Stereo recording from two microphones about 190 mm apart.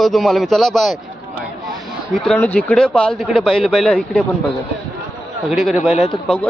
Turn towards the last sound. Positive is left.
turn(degrees=35)  # may be behind; listen again after turning